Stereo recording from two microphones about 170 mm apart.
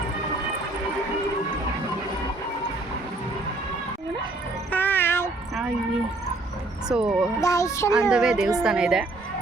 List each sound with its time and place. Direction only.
4.7 s cat: 10° left (ahead or behind)
6.8 s a woman's voice: 5° right (ahead or behind)
7.4 s speech: 15° left (ahead or behind)
8.1 s a woman's voice: 5° right (ahead or behind)